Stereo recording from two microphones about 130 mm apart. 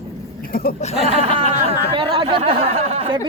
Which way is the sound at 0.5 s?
90° left.